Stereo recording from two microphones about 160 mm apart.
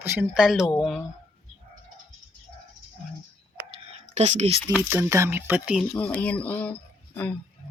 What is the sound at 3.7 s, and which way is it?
Whispering, 45° right (ahead or behind).